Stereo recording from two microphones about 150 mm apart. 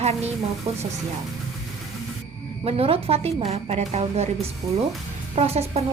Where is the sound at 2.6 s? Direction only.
40° right (ahead or behind).